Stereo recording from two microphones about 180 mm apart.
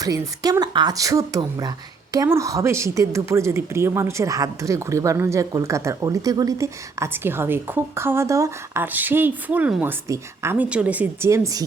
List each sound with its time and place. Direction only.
0.0 s a woman's voice: 20° right (ahead or behind)